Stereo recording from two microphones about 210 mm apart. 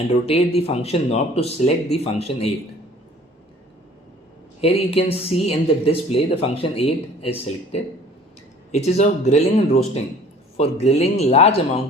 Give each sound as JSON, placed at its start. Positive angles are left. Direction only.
{"t": 0.3, "sound": "speech", "side_deg": 25}
{"t": 4.6, "sound": "speech", "side_deg": 30}
{"t": 10.6, "sound": "speech", "side_deg": 30}